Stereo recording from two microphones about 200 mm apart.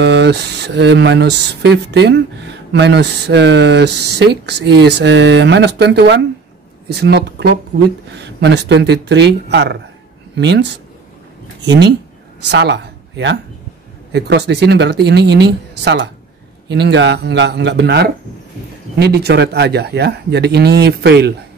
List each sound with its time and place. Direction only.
0.0 s speech: 60° right (ahead or behind)